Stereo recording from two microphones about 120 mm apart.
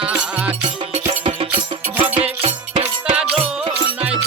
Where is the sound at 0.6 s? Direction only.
50° right (ahead or behind).